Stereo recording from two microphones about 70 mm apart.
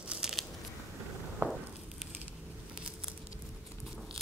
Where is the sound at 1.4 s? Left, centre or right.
Right.